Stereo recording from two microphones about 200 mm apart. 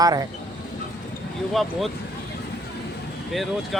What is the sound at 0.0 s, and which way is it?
Speech, 20° right (ahead or behind).